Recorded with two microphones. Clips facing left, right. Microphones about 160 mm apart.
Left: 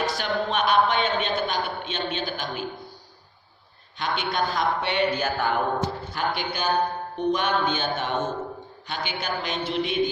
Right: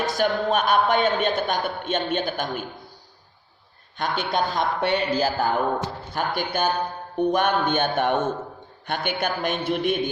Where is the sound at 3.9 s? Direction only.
50° right (ahead or behind).